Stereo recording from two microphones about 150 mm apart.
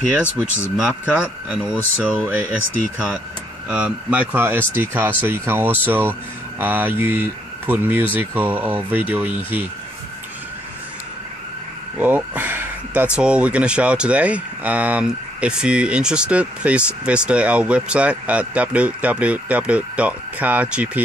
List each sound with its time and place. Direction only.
0.1 s speech: 10° right (ahead or behind)
12.0 s speech: 10° right (ahead or behind)